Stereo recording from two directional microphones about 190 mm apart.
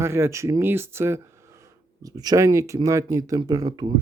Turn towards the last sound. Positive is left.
turn(degrees=-20)  # may be behind; listen again after turning